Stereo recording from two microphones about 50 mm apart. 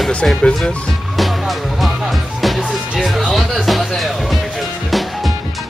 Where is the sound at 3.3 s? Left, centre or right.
Centre.